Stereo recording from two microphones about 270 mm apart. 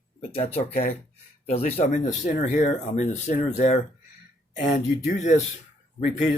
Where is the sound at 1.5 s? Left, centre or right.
Left.